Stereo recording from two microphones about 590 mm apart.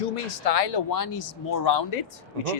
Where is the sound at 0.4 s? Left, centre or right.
Left.